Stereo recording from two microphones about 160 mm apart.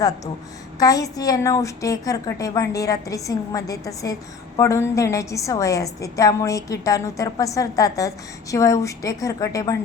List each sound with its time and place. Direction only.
0.8 s a woman's voice: 20° left (ahead or behind)